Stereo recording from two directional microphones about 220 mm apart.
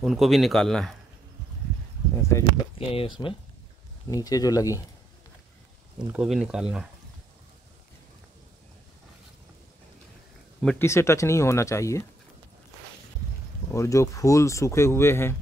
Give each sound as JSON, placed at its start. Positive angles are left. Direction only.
{"t": 0.0, "sound": "speech", "side_deg": 0}
{"t": 2.2, "sound": "speech", "side_deg": 15}
{"t": 6.1, "sound": "speech", "side_deg": -5}
{"t": 10.6, "sound": "speech", "side_deg": 5}
{"t": 13.7, "sound": "speech", "side_deg": 15}